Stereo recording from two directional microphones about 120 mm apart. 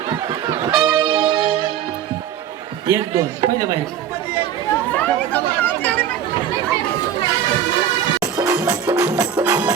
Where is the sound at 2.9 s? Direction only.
35° right (ahead or behind).